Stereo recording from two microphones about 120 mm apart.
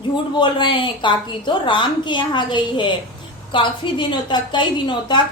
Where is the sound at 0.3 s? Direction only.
40° left (ahead or behind).